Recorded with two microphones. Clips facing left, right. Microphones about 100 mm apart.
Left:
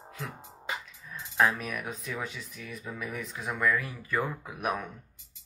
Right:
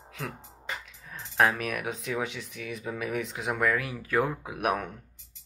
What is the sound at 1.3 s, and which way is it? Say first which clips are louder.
Speech: right 2 dB; 65° right (ahead or behind).